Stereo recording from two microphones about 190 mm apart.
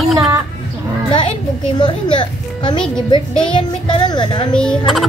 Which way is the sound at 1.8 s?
25° left (ahead or behind).